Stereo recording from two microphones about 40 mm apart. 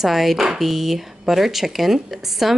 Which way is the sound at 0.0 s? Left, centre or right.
Centre.